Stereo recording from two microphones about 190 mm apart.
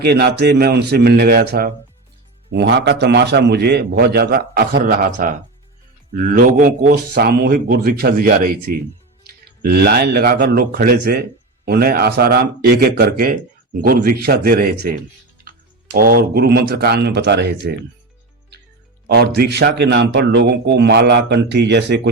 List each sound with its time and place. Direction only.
0.0 s speech: 60° right (ahead or behind)
2.5 s a man's voice: 65° right (ahead or behind)
19.0 s speech: 55° right (ahead or behind)